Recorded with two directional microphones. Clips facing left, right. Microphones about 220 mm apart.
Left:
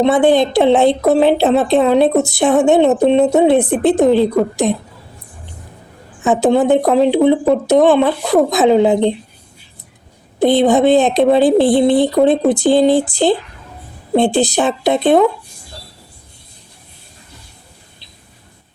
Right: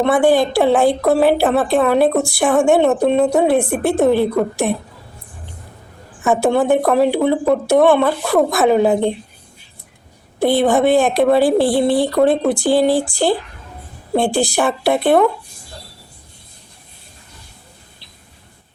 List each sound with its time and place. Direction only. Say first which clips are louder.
0.0 s a woman's voice: left 2 dB; 20° left (ahead or behind)
4.6 s a woman's voice: left 3 dB; 10° right (ahead or behind)
6.2 s a woman's voice: left 2 dB; 20° left (ahead or behind)
10.4 s a woman's voice: left 3 dB; 20° left (ahead or behind)